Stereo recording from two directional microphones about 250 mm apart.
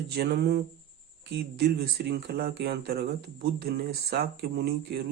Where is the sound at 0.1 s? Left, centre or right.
Right.